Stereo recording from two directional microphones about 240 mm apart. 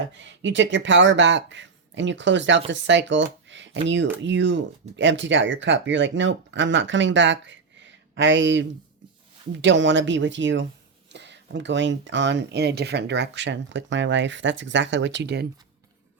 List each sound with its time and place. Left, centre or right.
0.2 s speech: right